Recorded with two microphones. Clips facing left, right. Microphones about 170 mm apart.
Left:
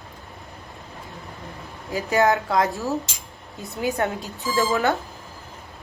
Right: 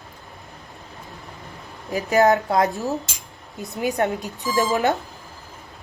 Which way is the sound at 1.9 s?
20° right (ahead or behind).